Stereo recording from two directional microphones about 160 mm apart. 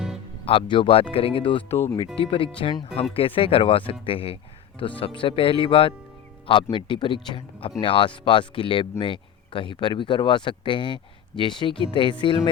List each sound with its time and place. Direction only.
0.4 s speech: 35° left (ahead or behind)
1.7 s speech: 15° left (ahead or behind)
2.1 s speech: 35° left (ahead or behind)